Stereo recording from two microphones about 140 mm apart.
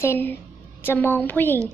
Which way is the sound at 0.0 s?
15° left (ahead or behind).